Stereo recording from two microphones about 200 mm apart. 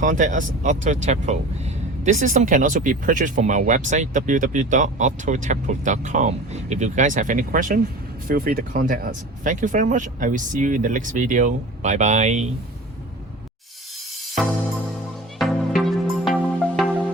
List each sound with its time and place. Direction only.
0.0 s speech: 40° right (ahead or behind)
15.4 s music: centre (ahead or behind)